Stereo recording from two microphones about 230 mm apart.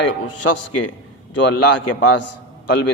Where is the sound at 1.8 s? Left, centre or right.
Left.